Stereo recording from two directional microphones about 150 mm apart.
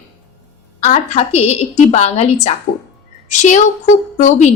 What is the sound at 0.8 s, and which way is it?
A woman's voice, 50° left (ahead or behind).